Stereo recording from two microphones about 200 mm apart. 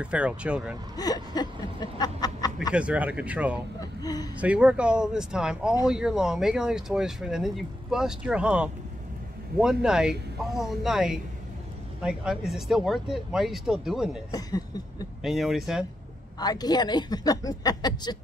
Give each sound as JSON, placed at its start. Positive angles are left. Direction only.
{"t": 0.0, "sound": "speech", "side_deg": -5}
{"t": 0.9, "sound": "snicker", "side_deg": 20}
{"t": 2.7, "sound": "speech", "side_deg": -5}
{"t": 3.8, "sound": "a sound", "side_deg": 20}
{"t": 4.4, "sound": "speech", "side_deg": -5}
{"t": 14.3, "sound": "speech", "side_deg": 20}
{"t": 15.2, "sound": "speech", "side_deg": 0}
{"t": 16.3, "sound": "a woman's voice", "side_deg": 20}